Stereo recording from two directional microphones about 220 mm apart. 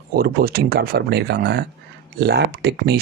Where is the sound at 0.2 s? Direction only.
45° right (ahead or behind).